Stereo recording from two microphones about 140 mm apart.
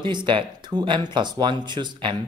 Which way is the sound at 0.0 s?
35° right (ahead or behind).